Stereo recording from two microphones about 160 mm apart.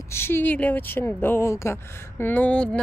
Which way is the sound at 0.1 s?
15° left (ahead or behind).